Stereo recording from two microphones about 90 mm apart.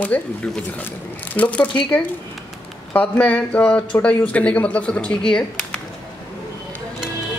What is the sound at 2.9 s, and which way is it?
Speech, 15° left (ahead or behind).